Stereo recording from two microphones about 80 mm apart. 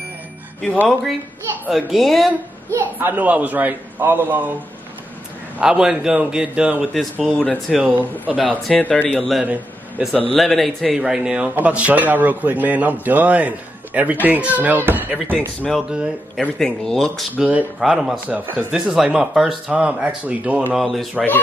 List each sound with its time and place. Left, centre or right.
1.7 s a man's voice: centre
2.7 s a man's voice: right
5.6 s speech: centre
6.9 s a man's voice: centre
7.7 s a man's voice: centre
8.7 s speech: centre
9.1 s a man's voice: centre
10.3 s a man's voice: centre; by 15.3 s right
15.3 s a man's voice: centre
17.4 s a man's voice: centre
17.7 s a man's voice: centre
20.7 s a man's voice: centre